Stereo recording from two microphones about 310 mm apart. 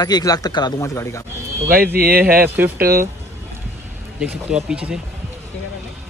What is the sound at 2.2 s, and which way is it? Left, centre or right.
Speech, centre.